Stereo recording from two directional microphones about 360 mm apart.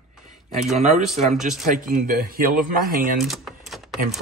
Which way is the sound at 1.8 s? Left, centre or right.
Right.